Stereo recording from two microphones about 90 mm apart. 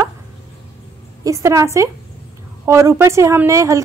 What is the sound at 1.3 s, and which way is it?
A woman's voice, 35° right (ahead or behind).